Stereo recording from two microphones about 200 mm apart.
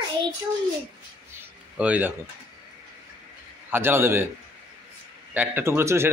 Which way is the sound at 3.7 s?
10° right (ahead or behind).